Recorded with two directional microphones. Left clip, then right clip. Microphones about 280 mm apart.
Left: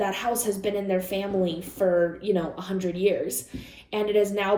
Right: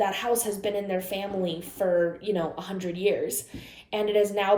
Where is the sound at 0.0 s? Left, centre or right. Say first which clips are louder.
Right 1 dB; centre.